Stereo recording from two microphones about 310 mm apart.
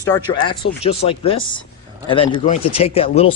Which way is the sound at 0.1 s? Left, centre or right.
Centre.